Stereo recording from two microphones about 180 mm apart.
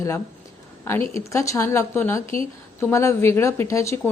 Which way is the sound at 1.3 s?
15° left (ahead or behind).